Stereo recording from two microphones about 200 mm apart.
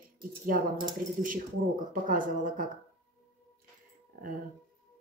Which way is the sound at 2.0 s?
45° right (ahead or behind).